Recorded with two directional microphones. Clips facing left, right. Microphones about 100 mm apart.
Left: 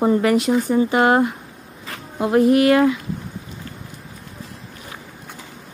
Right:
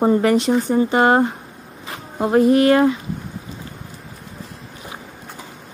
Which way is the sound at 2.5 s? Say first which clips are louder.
Even; 30° right (ahead or behind).